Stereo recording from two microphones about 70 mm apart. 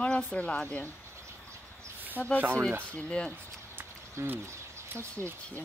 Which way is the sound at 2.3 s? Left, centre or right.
Right.